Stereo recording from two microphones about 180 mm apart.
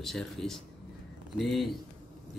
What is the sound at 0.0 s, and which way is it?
Speech, centre (ahead or behind).